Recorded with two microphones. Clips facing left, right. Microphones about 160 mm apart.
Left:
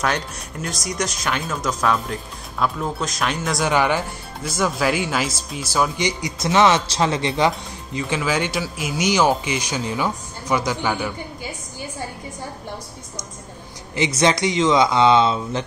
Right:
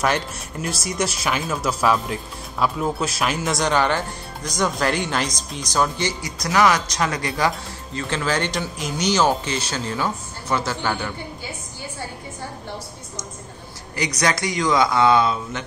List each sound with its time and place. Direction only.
0.0 s speech: 5° right (ahead or behind)
3.7 s speech: 10° left (ahead or behind)
6.4 s speech: 25° left (ahead or behind)
8.0 s speech: 10° left (ahead or behind)
13.9 s speech: 25° left (ahead or behind)